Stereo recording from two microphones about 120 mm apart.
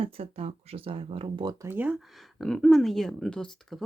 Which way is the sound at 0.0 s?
55° right (ahead or behind).